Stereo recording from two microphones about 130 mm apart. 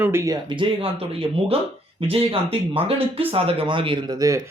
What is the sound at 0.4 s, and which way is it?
Speech, 40° right (ahead or behind).